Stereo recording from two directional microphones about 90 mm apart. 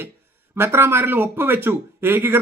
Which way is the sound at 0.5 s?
25° right (ahead or behind).